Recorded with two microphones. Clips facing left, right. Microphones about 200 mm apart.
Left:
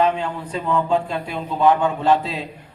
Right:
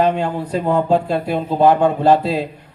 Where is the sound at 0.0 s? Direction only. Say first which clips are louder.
Right 3 dB; 40° right (ahead or behind).